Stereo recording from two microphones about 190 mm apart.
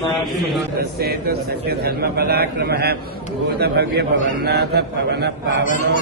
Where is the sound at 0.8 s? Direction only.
55° right (ahead or behind).